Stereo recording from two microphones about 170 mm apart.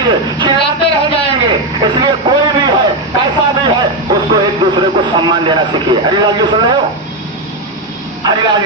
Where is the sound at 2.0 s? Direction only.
25° right (ahead or behind).